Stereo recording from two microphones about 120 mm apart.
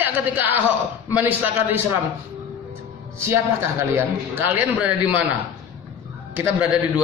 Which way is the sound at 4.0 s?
20° right (ahead or behind).